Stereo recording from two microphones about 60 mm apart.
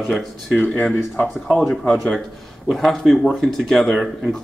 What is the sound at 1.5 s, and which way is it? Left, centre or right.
Speech, centre.